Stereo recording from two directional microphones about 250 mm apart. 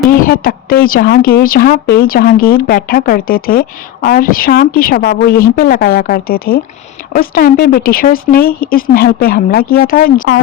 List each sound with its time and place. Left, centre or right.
0.1 s a woman's voice: left